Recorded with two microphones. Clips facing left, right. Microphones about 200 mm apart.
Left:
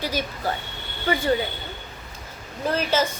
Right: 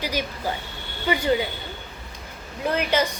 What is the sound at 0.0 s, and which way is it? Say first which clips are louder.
A woman's voice: even; 15° right (ahead or behind).